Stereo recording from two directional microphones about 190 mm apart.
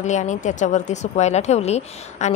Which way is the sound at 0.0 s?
40° left (ahead or behind).